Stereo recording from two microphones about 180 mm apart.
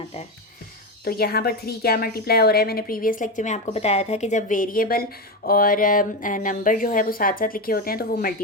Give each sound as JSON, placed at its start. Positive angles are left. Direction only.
{"t": 1.0, "sound": "a woman's voice", "side_deg": 60}